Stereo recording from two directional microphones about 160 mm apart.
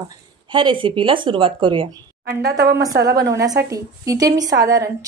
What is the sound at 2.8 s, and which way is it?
A woman's voice, 25° right (ahead or behind).